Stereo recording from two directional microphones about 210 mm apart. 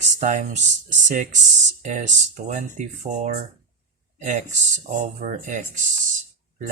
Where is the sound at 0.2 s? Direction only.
35° right (ahead or behind).